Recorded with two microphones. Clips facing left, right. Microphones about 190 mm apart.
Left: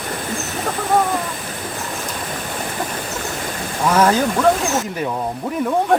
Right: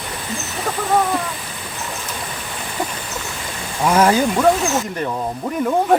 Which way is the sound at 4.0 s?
10° right (ahead or behind).